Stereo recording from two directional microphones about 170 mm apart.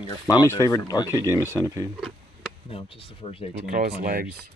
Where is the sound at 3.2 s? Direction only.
30° left (ahead or behind).